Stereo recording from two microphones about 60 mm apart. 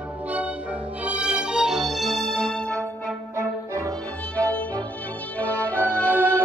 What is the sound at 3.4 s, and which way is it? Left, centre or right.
Music, right.